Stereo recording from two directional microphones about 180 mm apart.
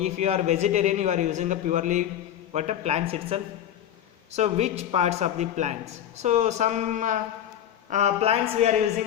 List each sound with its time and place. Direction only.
0.0 s a man's voice: 35° right (ahead or behind)